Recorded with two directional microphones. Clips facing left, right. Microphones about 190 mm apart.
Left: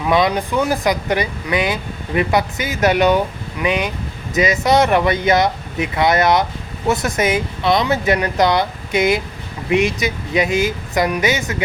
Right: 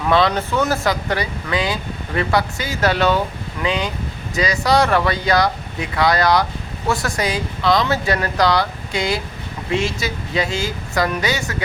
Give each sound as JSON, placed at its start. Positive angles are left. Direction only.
{"t": 0.0, "sound": "speech", "side_deg": 10}